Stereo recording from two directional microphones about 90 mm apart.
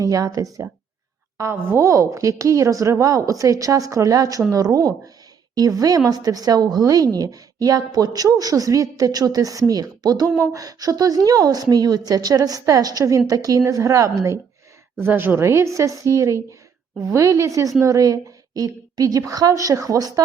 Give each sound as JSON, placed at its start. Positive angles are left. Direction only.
{"t": 0.0, "sound": "a woman's voice", "side_deg": -40}
{"t": 14.9, "sound": "speech", "side_deg": -25}